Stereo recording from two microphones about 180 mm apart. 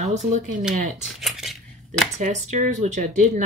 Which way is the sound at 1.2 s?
Centre (ahead or behind).